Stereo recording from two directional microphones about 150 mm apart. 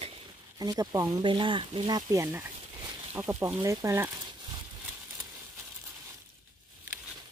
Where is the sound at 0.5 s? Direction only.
25° right (ahead or behind).